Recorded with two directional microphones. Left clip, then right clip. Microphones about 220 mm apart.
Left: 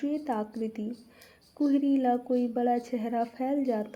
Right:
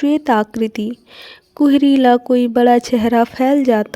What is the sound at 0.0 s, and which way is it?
Speech, 40° right (ahead or behind).